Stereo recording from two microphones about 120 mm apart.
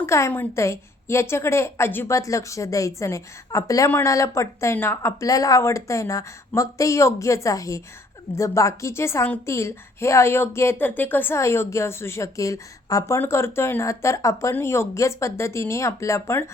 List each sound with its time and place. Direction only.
0.0 s a woman's voice: 20° left (ahead or behind)